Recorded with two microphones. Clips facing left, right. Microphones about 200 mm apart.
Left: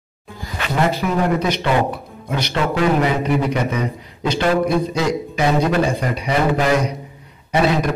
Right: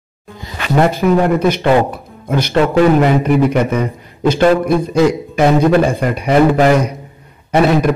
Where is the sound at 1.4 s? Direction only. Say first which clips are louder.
Right 6 dB; 50° right (ahead or behind).